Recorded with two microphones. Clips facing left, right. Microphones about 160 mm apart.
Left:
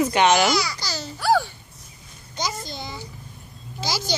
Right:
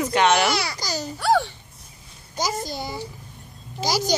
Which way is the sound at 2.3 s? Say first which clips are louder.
Right 3 dB; 40° right (ahead or behind).